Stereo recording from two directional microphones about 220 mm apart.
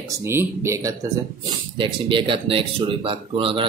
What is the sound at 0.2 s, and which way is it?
Speech, 10° right (ahead or behind).